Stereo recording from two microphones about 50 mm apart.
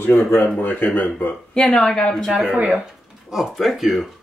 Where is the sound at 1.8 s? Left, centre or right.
Centre.